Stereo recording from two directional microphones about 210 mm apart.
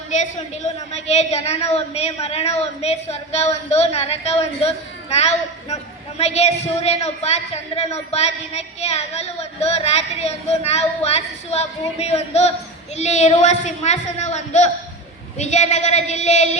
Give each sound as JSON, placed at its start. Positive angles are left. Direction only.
{"t": 0.1, "sound": "a woman's voice", "side_deg": 35}